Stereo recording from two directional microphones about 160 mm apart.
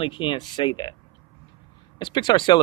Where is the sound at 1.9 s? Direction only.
30° left (ahead or behind).